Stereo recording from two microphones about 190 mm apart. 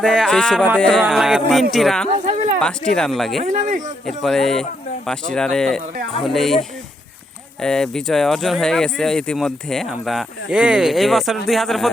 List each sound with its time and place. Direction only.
0.0 s speech: centre (ahead or behind)
3.4 s speech: 40° right (ahead or behind)
4.0 s speech: centre (ahead or behind)